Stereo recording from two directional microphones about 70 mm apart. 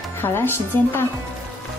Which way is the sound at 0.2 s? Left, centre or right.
Left.